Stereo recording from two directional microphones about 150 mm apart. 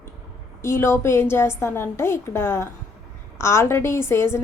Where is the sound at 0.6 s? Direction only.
20° left (ahead or behind).